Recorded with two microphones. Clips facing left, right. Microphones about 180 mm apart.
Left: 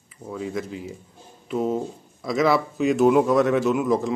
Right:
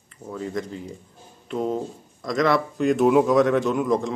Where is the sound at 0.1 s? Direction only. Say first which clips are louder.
Even; 5° left (ahead or behind).